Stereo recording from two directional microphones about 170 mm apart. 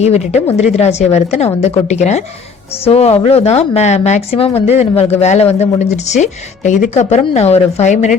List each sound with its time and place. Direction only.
0.0 s speech: 40° left (ahead or behind)